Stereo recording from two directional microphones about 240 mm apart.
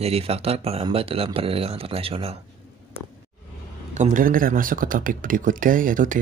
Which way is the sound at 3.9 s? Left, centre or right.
Right.